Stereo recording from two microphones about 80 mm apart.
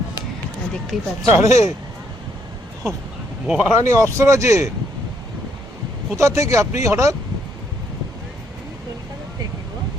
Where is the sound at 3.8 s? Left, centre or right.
Right.